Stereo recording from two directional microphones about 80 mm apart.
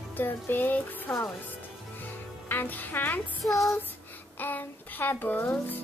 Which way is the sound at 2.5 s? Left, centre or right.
Left.